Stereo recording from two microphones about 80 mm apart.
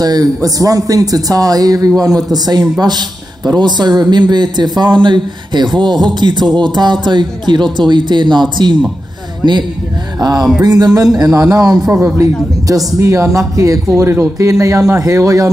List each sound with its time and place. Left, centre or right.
0.0 s a man's voice: right
6.0 s music: right
10.2 s a man's voice: right